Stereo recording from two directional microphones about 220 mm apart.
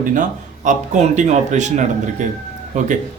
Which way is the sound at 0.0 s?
35° right (ahead or behind).